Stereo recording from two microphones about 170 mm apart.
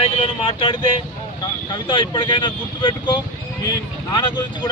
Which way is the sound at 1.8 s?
25° left (ahead or behind).